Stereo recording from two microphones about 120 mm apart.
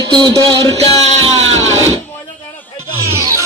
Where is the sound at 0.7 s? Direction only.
30° left (ahead or behind).